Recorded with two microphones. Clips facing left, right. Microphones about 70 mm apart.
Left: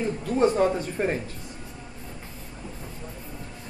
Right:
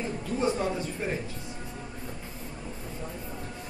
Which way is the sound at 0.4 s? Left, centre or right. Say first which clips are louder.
Left 7 dB; left.